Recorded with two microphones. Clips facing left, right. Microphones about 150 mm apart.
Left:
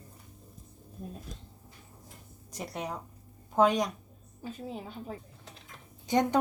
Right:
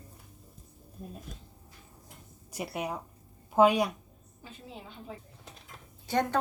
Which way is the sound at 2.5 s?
10° right (ahead or behind).